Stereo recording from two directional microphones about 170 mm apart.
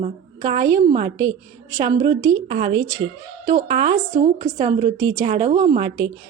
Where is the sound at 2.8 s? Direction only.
25° right (ahead or behind).